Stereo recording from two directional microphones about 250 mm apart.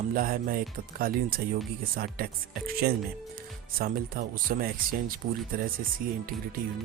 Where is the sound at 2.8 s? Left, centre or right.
Right.